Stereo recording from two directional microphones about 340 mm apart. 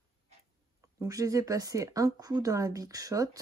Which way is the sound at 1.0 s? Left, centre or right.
Centre.